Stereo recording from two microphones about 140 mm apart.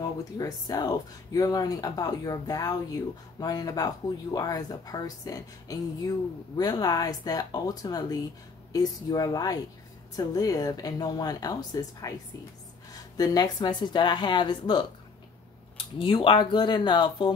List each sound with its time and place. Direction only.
0.0 s speech: 25° left (ahead or behind)